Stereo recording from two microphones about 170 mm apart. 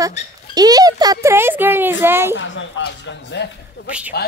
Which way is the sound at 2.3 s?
90° left.